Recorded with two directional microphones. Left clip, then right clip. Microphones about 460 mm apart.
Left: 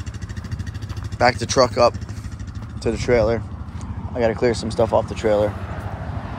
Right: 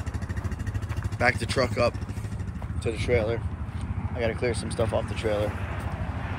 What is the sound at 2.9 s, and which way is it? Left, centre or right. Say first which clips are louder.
Speech: left 8 dB; left.